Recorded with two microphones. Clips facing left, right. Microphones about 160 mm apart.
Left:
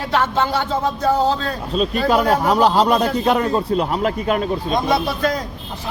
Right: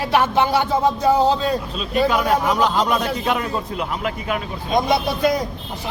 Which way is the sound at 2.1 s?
35° left (ahead or behind).